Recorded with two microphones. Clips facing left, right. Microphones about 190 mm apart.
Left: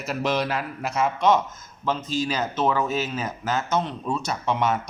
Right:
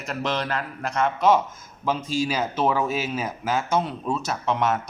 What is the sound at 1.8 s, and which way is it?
Speech, 10° right (ahead or behind).